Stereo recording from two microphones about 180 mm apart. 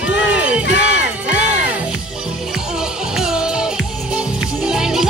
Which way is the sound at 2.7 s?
Centre (ahead or behind).